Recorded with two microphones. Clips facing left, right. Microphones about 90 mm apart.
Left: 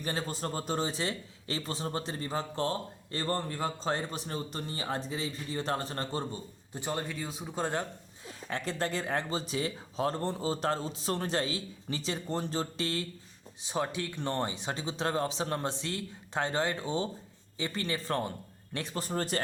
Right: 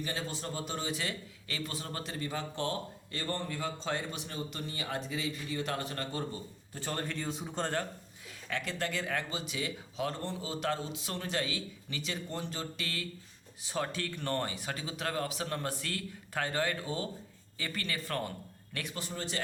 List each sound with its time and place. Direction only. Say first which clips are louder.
0.0 s a man's voice: left 3 dB; 40° left (ahead or behind)
6.7 s a man's voice: left 2 dB; 15° left (ahead or behind)
8.4 s a man's voice: left 3 dB; 35° left (ahead or behind)
13.6 s a man's voice: left 2 dB; 20° left (ahead or behind); by 19.4 s 45° left (ahead or behind)